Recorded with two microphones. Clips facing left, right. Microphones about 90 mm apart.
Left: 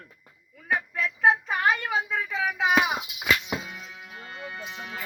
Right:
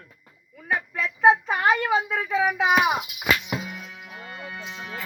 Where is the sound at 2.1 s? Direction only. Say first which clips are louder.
Right 5 dB; 15° right (ahead or behind).